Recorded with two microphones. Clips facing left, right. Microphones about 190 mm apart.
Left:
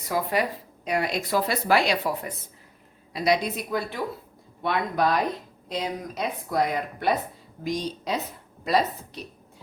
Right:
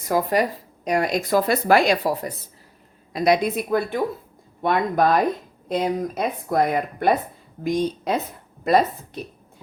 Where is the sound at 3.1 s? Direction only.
50° right (ahead or behind).